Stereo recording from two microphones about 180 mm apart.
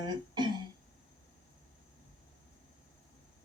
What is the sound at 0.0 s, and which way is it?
Throat clearing, 25° right (ahead or behind).